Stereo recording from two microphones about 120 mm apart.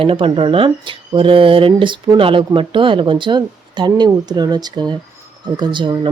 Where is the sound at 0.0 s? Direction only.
45° right (ahead or behind).